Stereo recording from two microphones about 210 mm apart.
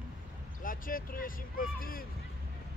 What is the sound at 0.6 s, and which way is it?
Speech, 40° left (ahead or behind).